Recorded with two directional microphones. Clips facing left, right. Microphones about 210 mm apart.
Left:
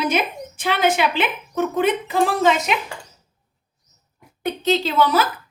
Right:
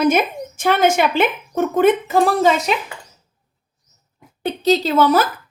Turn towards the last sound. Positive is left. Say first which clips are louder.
# right 4 dB
turn(degrees=-45)  # may be behind; listen again after turning